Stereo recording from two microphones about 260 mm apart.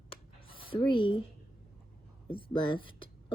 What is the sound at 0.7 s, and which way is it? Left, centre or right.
Speech, centre.